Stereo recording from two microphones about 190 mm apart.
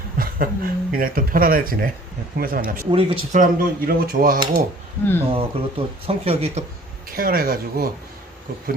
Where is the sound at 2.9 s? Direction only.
30° right (ahead or behind).